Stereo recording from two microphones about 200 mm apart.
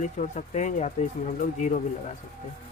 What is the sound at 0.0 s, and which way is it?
Speech, 35° left (ahead or behind).